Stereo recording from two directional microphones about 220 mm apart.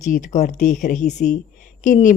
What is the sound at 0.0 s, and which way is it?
A woman's voice, 35° left (ahead or behind).